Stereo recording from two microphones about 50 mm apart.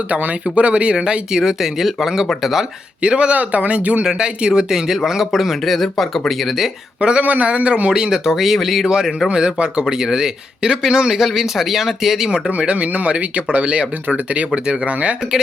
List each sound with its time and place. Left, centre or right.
0.1 s speech: right; by 2.6 s centre
3.0 s speech: right; by 6.7 s centre
7.2 s speech: right; by 12.4 s centre
12.5 s speech: right